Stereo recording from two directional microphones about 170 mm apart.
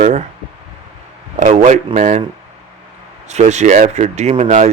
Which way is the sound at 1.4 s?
45° right (ahead or behind).